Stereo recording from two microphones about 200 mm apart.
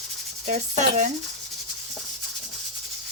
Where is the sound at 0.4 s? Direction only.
35° right (ahead or behind).